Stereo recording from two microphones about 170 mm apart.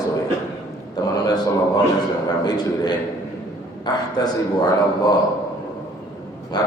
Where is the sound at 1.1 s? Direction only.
20° left (ahead or behind).